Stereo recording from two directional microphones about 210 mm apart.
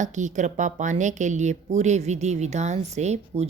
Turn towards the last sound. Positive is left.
turn(degrees=-30)  # may be behind; listen again after turning